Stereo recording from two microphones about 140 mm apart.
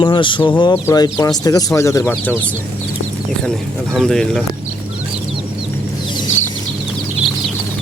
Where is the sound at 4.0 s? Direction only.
5° left (ahead or behind).